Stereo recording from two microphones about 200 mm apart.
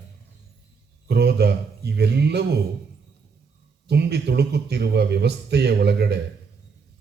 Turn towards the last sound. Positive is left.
turn(degrees=-55)  # may be behind; listen again after turning